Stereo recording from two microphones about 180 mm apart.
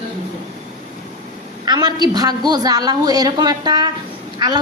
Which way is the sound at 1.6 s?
25° right (ahead or behind).